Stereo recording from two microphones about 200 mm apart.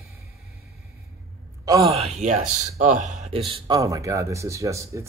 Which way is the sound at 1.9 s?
30° right (ahead or behind).